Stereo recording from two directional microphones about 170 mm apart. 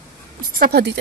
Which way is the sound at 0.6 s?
75° right (ahead or behind).